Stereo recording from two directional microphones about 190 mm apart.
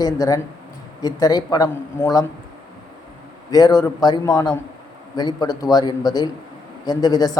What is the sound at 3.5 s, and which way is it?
A man's voice, 20° left (ahead or behind).